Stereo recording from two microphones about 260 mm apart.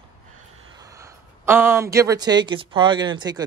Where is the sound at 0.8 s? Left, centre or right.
Centre.